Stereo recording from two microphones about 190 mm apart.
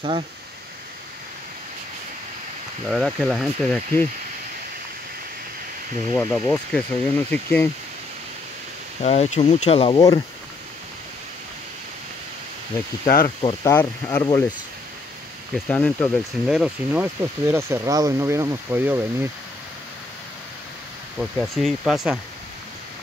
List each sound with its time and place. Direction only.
2.9 s speech: centre (ahead or behind)
6.1 s speech: 10° left (ahead or behind)
9.0 s speech: 35° left (ahead or behind)
13.0 s speech: 50° left (ahead or behind)
13.7 s speech: 10° left (ahead or behind)
15.7 s speech: 5° left (ahead or behind); by 19.2 s 10° right (ahead or behind)
21.2 s speech: centre (ahead or behind)